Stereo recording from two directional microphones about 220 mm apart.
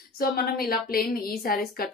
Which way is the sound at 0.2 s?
40° left (ahead or behind).